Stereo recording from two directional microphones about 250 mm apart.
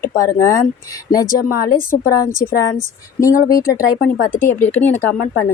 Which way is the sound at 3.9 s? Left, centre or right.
Left.